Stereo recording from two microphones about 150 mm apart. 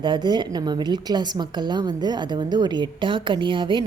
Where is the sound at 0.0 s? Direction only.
30° right (ahead or behind).